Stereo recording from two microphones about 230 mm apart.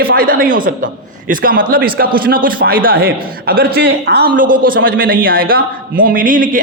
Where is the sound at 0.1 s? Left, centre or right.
Right.